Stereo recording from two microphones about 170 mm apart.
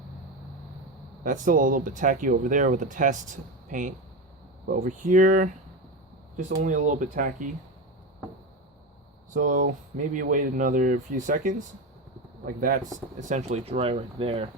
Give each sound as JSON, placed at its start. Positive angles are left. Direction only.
{"t": 1.2, "sound": "speech", "side_deg": -50}
{"t": 9.3, "sound": "speech", "side_deg": -50}
{"t": 12.5, "sound": "speech", "side_deg": -50}